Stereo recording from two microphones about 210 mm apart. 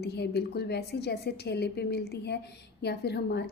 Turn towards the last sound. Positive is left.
turn(degrees=50)  # may be behind; listen again after turning